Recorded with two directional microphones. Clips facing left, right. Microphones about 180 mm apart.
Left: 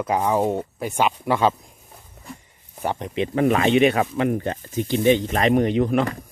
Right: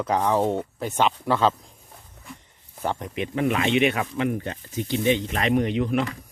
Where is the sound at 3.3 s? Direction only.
40° left (ahead or behind).